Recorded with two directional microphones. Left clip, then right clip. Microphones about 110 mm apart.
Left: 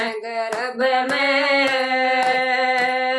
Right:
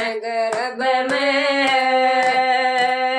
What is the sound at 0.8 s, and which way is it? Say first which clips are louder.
Singing: left 1 dB; 40° left (ahead or behind).